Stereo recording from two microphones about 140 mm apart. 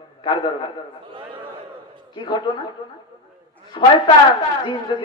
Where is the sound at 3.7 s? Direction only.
35° left (ahead or behind).